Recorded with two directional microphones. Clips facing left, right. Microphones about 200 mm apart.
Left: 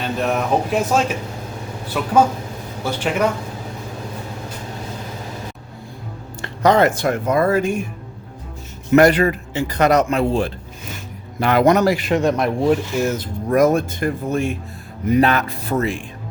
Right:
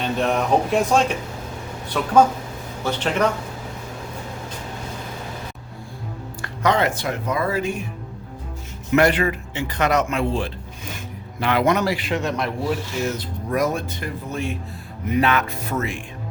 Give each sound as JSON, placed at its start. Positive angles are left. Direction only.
{"t": 0.0, "sound": "a man's voice", "side_deg": 5}
{"t": 6.4, "sound": "speech", "side_deg": 35}
{"t": 8.9, "sound": "a man's voice", "side_deg": 40}
{"t": 15.1, "sound": "a man's voice", "side_deg": 35}